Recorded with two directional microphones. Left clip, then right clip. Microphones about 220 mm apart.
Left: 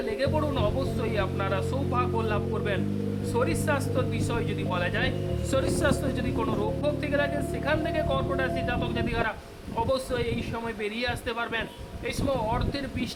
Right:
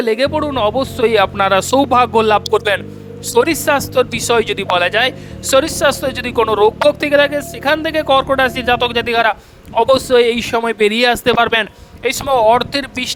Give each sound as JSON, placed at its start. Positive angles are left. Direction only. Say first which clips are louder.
{"t": 0.0, "sound": "speech", "louder": "right 13 dB", "side_deg": -50}